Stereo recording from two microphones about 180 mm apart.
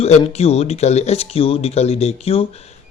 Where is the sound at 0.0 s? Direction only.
35° left (ahead or behind).